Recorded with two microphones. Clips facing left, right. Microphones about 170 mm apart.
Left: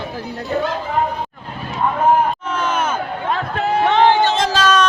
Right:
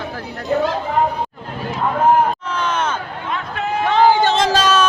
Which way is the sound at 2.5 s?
5° left (ahead or behind).